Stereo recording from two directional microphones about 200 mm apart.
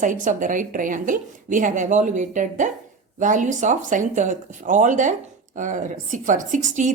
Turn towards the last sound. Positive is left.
turn(degrees=-40)  # may be behind; listen again after turning